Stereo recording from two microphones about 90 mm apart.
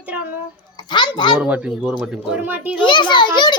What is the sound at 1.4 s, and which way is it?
Speech, 10° right (ahead or behind).